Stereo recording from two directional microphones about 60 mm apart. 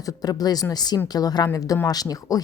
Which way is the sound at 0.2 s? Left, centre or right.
Left.